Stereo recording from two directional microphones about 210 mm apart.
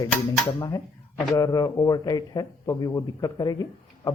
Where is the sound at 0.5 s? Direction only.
15° left (ahead or behind).